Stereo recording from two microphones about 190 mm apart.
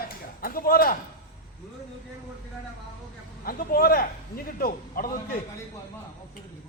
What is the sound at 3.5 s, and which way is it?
Speech, 50° left (ahead or behind).